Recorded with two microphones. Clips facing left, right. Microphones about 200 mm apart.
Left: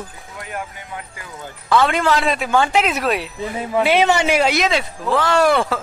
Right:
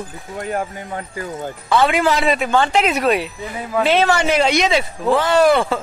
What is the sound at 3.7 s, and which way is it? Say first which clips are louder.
Speech: even; 15° left (ahead or behind).